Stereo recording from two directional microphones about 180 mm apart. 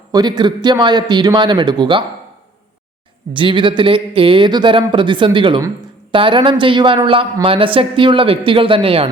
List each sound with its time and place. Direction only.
0.1 s a woman's voice: 25° right (ahead or behind)
3.3 s a woman's voice: 25° right (ahead or behind)